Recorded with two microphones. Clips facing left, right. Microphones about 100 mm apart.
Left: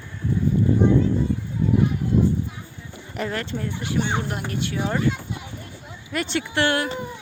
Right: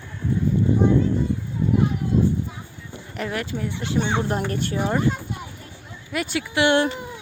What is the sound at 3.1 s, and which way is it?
Speech, 5° right (ahead or behind).